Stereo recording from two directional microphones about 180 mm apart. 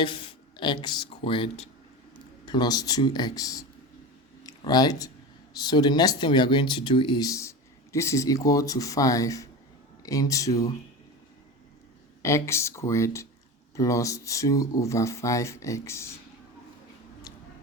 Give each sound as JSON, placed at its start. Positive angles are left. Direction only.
{"t": 0.0, "sound": "speech", "side_deg": 30}
{"t": 2.5, "sound": "speech", "side_deg": 20}
{"t": 12.2, "sound": "speech", "side_deg": 15}